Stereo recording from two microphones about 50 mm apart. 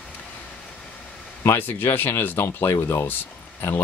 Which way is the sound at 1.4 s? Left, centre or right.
Left.